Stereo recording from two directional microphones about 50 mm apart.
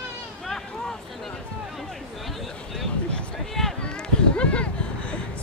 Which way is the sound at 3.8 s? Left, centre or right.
Left.